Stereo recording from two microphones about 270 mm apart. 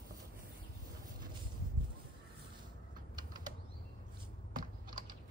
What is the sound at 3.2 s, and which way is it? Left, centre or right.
Bird flight, centre.